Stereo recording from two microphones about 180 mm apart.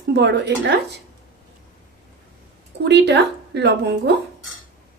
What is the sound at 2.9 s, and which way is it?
A woman's voice, 70° right (ahead or behind).